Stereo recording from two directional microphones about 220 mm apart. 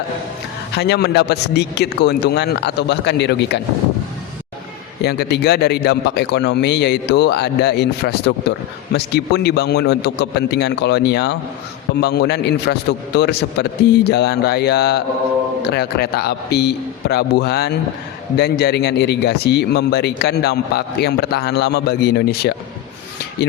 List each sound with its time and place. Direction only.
0.8 s a man's voice: 50° left (ahead or behind)
5.0 s a man's voice: 45° left (ahead or behind)